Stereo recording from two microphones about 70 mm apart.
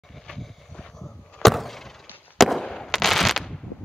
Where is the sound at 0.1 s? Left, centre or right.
Centre.